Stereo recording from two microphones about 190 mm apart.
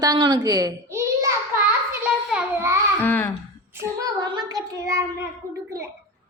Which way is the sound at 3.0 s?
10° left (ahead or behind).